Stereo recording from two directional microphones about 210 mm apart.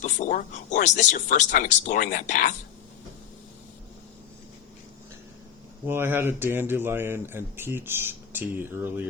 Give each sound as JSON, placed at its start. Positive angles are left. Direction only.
{"t": 0.0, "sound": "speech", "side_deg": 35}
{"t": 5.9, "sound": "speech", "side_deg": -10}